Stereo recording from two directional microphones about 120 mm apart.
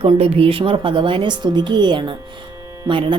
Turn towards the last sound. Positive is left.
turn(degrees=-40)  # may be behind; listen again after turning